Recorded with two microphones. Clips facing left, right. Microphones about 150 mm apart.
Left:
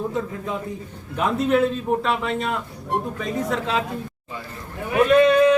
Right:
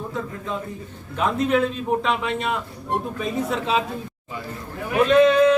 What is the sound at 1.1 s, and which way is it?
A man's voice, 5° left (ahead or behind).